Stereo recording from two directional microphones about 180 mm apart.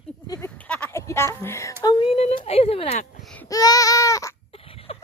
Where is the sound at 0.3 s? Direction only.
10° left (ahead or behind).